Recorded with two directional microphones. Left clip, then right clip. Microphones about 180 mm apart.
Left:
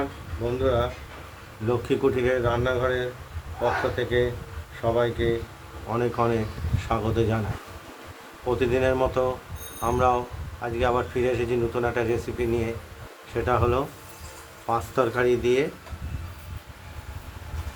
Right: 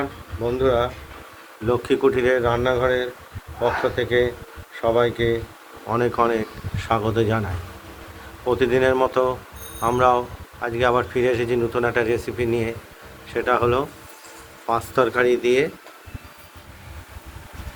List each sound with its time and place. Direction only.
0.6 s speech: 35° right (ahead or behind)
1.6 s speech: 15° right (ahead or behind)
2.3 s speech: 35° right (ahead or behind)
5.9 s speech: 20° right (ahead or behind)
8.4 s speech: 10° right (ahead or behind)